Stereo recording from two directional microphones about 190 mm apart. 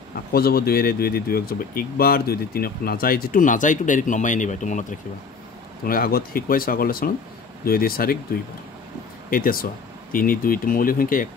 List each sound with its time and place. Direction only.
0.3 s speech: 55° left (ahead or behind)
5.9 s speech: 50° left (ahead or behind)
9.3 s speech: 50° left (ahead or behind)